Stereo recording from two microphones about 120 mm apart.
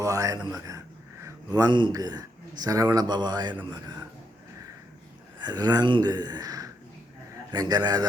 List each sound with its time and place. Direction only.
0.0 s a man's voice: 30° right (ahead or behind)
5.4 s speech: 35° right (ahead or behind)